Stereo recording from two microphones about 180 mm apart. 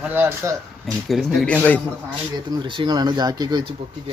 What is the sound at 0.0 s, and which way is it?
Speech, 10° right (ahead or behind).